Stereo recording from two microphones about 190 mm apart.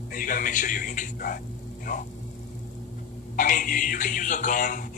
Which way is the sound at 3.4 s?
45° left (ahead or behind).